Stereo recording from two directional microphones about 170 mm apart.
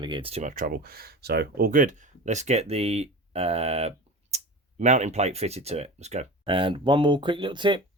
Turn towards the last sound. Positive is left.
turn(degrees=-30)  # may be behind; listen again after turning